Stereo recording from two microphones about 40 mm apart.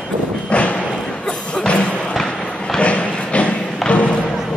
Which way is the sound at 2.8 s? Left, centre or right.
Left.